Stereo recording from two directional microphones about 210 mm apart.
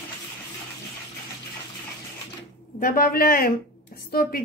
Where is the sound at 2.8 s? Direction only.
45° left (ahead or behind).